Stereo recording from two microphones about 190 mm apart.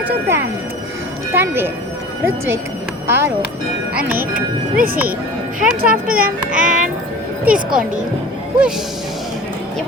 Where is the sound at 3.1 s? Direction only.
10° right (ahead or behind).